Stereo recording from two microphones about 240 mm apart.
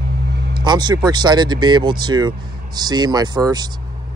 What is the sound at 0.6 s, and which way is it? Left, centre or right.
Speech, centre.